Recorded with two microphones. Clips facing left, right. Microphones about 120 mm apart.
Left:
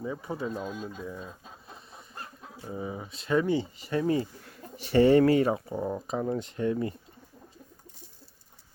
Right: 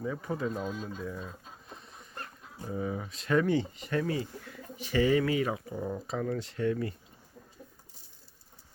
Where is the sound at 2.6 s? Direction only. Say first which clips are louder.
Right 2 dB; 15° left (ahead or behind).